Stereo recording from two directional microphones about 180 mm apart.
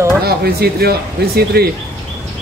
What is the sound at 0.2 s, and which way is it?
Speech, 60° right (ahead or behind).